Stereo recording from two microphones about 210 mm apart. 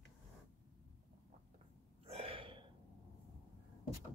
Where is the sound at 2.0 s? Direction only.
30° right (ahead or behind).